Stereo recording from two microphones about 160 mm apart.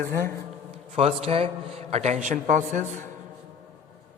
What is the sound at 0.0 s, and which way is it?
Speech, 65° right (ahead or behind).